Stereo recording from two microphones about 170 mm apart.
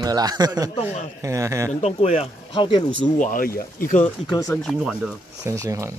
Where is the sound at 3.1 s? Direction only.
50° left (ahead or behind).